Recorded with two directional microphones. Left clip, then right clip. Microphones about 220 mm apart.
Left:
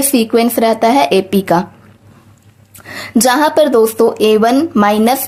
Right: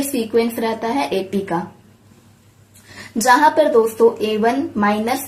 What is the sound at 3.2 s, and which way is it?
Speech, 50° left (ahead or behind).